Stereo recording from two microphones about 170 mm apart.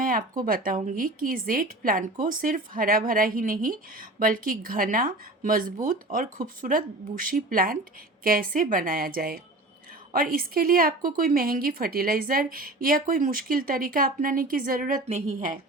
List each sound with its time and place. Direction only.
0.0 s a woman's voice: 55° right (ahead or behind)